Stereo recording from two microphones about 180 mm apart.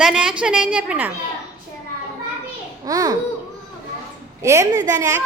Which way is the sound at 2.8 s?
20° right (ahead or behind).